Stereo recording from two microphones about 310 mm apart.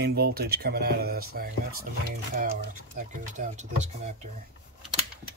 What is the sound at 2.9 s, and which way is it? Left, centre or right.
Speech, right.